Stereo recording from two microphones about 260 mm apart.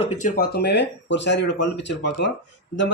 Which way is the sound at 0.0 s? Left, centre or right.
Left.